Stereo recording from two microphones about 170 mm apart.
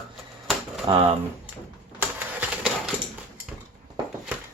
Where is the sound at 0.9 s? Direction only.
30° right (ahead or behind).